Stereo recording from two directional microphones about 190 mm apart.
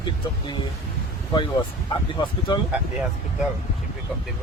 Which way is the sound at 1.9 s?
25° left (ahead or behind).